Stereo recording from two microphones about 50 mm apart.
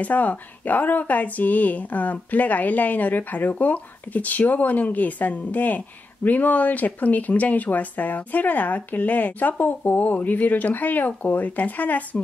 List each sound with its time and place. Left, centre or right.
0.0 s speech: left